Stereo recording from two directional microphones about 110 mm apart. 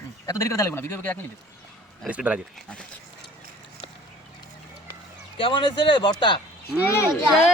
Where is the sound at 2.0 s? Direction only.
10° right (ahead or behind).